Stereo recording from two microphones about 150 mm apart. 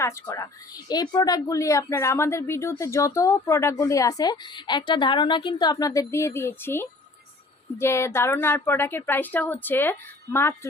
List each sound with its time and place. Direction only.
0.0 s a woman's voice: 25° left (ahead or behind)